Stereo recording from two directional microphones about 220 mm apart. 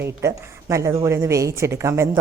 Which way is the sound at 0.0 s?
10° right (ahead or behind).